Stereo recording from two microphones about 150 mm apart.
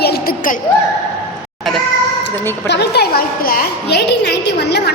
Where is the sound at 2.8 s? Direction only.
90° left.